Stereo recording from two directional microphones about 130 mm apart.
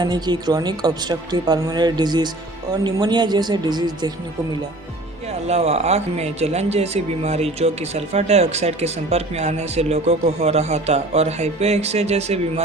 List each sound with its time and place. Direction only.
0.0 s speech: 35° right (ahead or behind)
5.3 s speech: 55° right (ahead or behind)